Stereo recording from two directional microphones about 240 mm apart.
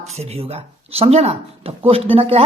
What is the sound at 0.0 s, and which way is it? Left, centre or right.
A woman's voice, right.